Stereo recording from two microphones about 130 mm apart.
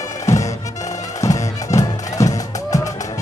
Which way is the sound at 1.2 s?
25° left (ahead or behind).